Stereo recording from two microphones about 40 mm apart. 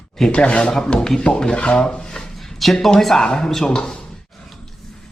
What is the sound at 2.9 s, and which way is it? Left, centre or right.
Speech, centre.